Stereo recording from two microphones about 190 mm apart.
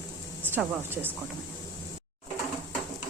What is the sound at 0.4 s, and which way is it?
Speech, 10° right (ahead or behind).